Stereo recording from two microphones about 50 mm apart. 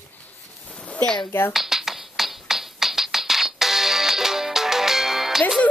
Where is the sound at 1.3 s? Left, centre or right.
Left.